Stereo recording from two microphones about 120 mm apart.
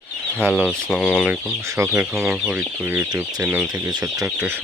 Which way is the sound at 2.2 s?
10° right (ahead or behind).